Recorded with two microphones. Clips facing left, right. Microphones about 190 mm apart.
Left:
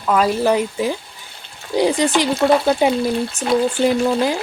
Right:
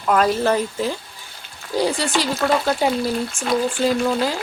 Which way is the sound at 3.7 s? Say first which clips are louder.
Left 3 dB; 20° left (ahead or behind).